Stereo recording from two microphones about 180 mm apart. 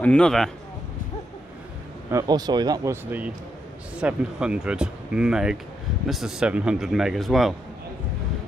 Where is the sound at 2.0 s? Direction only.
20° right (ahead or behind); by 7.5 s centre (ahead or behind).